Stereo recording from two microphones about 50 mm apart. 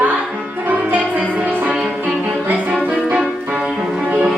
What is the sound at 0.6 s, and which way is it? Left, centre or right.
Music, right.